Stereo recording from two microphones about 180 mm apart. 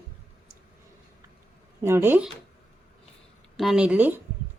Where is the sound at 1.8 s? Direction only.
15° right (ahead or behind).